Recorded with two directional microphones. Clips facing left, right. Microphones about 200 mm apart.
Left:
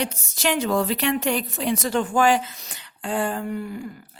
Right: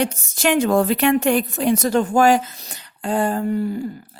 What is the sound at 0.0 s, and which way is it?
A woman's voice, 50° right (ahead or behind).